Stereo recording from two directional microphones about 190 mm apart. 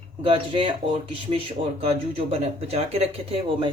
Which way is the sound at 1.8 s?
35° right (ahead or behind).